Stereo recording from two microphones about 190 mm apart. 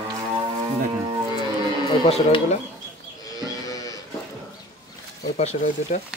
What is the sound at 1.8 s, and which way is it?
Speech, 30° left (ahead or behind).